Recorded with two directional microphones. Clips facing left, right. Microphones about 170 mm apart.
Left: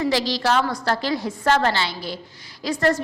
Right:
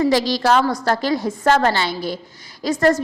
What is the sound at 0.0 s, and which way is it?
A woman's voice, 45° right (ahead or behind).